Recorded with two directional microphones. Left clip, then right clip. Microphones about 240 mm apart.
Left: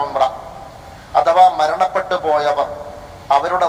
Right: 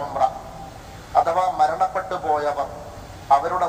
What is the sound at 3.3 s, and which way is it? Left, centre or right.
Speech, left.